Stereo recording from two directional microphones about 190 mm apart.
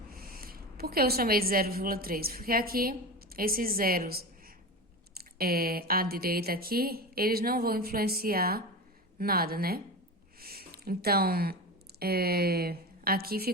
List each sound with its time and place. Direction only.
0.1 s a woman's voice: 50° right (ahead or behind)